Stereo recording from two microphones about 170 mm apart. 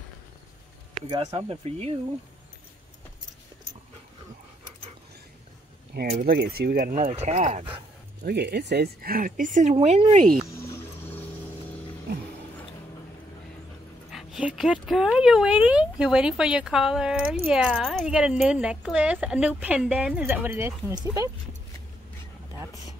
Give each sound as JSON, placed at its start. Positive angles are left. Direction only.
{"t": 1.0, "sound": "speech", "side_deg": -20}
{"t": 1.3, "sound": "speech", "side_deg": -35}
{"t": 6.1, "sound": "speech", "side_deg": -65}
{"t": 8.2, "sound": "speech", "side_deg": -75}
{"t": 10.6, "sound": "music", "side_deg": 15}
{"t": 14.1, "sound": "speech", "side_deg": -5}